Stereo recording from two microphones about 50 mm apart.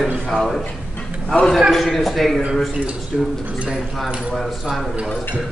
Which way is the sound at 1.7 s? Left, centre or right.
Centre.